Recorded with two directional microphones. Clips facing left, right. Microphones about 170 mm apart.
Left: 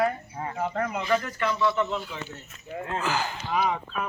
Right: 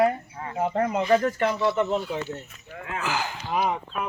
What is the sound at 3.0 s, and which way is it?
Speech, 10° right (ahead or behind).